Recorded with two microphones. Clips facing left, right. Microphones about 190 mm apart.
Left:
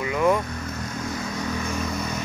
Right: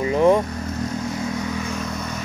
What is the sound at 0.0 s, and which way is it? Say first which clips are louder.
Vehicle: right 5 dB; 30° right (ahead or behind).